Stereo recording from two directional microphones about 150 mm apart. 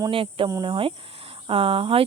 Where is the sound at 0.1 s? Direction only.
35° right (ahead or behind).